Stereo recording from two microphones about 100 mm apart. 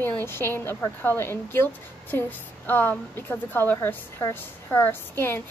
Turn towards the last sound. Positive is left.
turn(degrees=20)  # may be behind; listen again after turning